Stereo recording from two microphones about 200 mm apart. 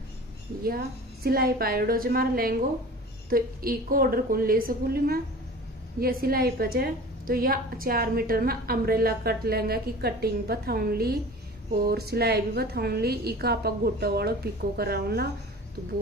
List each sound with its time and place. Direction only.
0.7 s a woman's voice: 50° right (ahead or behind)